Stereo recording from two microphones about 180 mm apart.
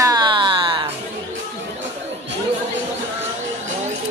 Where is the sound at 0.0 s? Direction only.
20° right (ahead or behind).